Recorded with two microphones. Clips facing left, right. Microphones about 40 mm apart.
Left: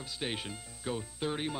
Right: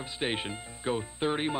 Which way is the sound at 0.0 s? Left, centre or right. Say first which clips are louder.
Right 5 dB; right.